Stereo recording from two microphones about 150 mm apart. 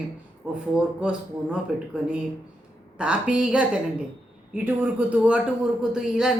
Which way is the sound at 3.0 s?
5° right (ahead or behind).